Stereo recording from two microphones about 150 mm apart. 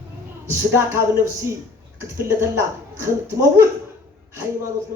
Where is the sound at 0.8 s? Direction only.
20° right (ahead or behind).